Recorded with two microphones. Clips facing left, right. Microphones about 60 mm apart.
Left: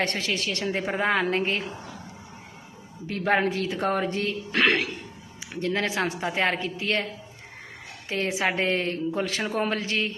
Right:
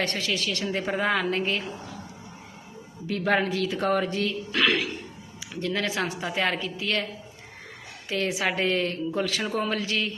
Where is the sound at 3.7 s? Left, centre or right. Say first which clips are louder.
Right 3 dB; centre.